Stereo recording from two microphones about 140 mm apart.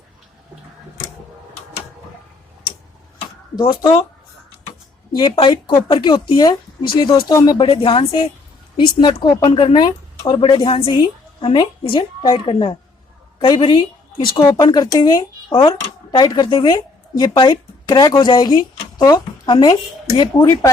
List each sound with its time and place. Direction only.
3.5 s a woman's voice: 30° left (ahead or behind)
5.1 s a woman's voice: 35° left (ahead or behind)
7.7 s a woman's voice: 40° left (ahead or behind)
15.4 s speech: 40° left (ahead or behind)